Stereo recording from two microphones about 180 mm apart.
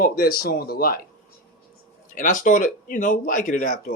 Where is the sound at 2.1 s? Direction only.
45° left (ahead or behind).